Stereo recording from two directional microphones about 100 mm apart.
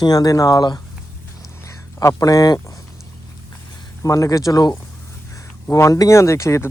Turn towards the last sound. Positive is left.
turn(degrees=30)  # may be behind; listen again after turning